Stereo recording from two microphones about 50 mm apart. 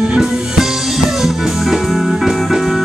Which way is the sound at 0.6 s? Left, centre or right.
Centre.